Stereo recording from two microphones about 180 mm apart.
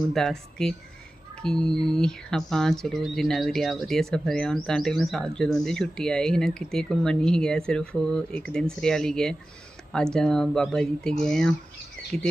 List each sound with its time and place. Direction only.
0.1 s speech: centre (ahead or behind)